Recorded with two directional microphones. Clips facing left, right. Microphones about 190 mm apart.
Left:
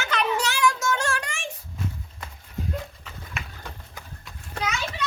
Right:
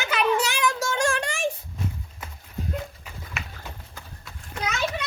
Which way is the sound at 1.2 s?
35° right (ahead or behind).